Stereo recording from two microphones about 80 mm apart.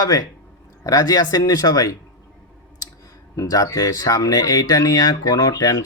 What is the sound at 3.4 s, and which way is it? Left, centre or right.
Speech, left.